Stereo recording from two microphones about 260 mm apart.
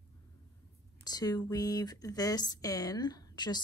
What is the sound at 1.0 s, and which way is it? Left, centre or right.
Speech, centre.